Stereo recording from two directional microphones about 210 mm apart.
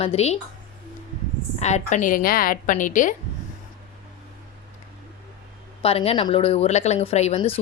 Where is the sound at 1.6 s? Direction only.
35° left (ahead or behind).